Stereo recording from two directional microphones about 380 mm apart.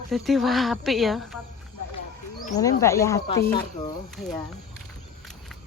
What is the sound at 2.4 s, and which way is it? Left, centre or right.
Speech, centre.